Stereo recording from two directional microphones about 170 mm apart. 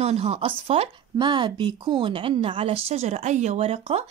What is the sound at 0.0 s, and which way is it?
Speech, 35° right (ahead or behind).